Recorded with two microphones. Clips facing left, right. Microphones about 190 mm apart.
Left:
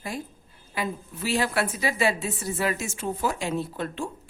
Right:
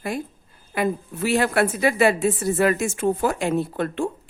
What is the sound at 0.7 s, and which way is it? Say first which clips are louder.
A woman's voice: right 7 dB; 55° right (ahead or behind).